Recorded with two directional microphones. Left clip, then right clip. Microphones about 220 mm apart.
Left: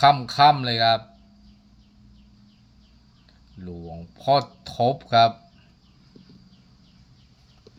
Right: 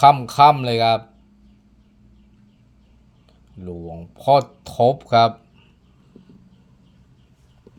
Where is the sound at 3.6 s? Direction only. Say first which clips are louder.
Right 5 dB; 15° right (ahead or behind).